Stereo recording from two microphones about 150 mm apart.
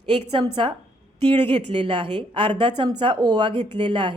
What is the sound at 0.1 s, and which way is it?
A woman's voice, 35° right (ahead or behind).